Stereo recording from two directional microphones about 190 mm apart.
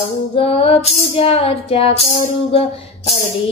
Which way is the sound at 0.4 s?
30° left (ahead or behind).